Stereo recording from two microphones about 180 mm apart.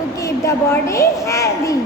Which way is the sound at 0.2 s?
15° left (ahead or behind).